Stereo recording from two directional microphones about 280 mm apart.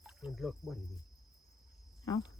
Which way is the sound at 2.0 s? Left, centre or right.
Centre.